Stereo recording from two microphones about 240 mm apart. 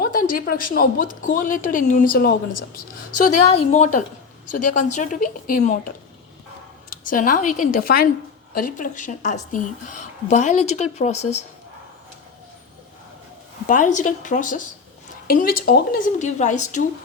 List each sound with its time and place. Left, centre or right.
0.0 s a woman's voice: left
3.4 s speech: left
4.6 s a woman's voice: left
4.9 s a woman's voice: left
6.9 s a woman's voice: left
13.7 s a woman's voice: left